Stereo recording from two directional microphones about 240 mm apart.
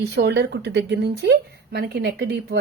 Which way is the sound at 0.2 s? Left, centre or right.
Right.